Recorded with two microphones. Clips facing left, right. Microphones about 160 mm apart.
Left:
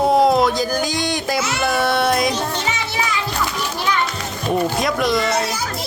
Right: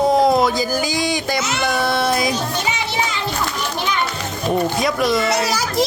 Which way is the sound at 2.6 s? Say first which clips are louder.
Right 1 dB; 15° right (ahead or behind).